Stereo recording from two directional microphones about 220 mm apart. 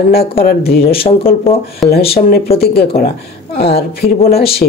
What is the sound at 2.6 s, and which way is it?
Speech, 45° left (ahead or behind).